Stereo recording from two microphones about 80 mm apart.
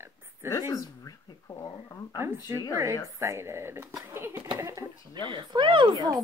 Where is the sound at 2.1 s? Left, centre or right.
Right.